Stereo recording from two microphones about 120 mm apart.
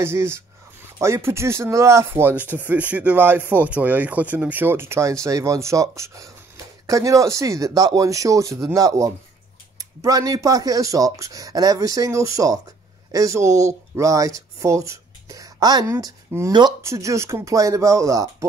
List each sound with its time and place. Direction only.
0.0 s speech: 20° right (ahead or behind)
14.6 s a sound: 25° right (ahead or behind)
15.9 s speech: 25° right (ahead or behind)